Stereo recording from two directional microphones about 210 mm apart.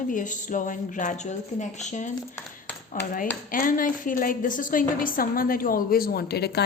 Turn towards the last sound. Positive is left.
turn(degrees=50)  # may be behind; listen again after turning